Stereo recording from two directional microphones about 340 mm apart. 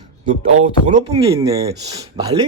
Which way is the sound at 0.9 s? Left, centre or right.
Centre.